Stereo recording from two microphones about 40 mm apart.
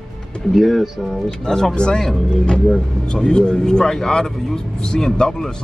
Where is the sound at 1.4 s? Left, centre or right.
Centre.